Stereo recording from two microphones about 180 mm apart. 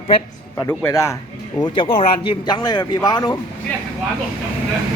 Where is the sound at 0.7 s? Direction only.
10° left (ahead or behind).